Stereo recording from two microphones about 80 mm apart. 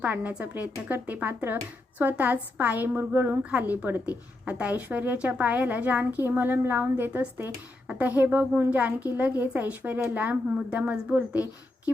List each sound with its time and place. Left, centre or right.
0.0 s a woman's voice: right